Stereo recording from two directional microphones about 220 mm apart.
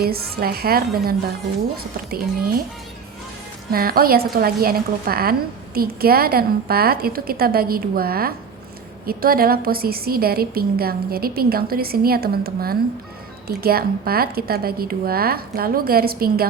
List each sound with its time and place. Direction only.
0.0 s a woman's voice: 45° right (ahead or behind)
3.7 s a woman's voice: 45° right (ahead or behind)